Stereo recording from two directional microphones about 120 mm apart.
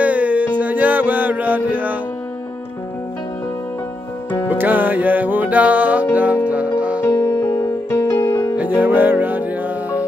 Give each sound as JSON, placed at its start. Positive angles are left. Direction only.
{"t": 0.0, "sound": "music", "side_deg": -10}
{"t": 4.5, "sound": "music", "side_deg": -15}
{"t": 7.0, "sound": "music", "side_deg": 30}
{"t": 8.5, "sound": "music", "side_deg": -15}